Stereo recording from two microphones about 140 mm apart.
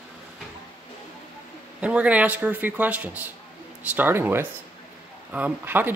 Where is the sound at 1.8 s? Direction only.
10° right (ahead or behind).